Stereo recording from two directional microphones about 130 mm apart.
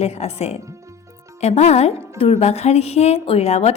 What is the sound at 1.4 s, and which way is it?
Music, 55° left (ahead or behind).